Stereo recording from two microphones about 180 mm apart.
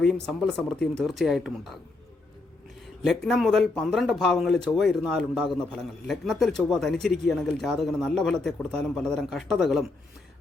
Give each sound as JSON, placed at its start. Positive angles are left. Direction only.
{"t": 0.0, "sound": "speech", "side_deg": 0}
{"t": 3.0, "sound": "speech", "side_deg": 0}